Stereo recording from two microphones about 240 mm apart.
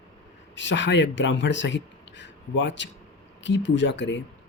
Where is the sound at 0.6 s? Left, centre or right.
Left.